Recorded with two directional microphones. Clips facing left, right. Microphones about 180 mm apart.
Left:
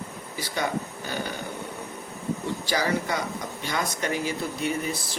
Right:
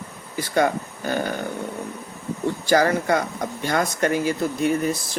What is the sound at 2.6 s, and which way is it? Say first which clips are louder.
Speech: right 8 dB; 50° right (ahead or behind).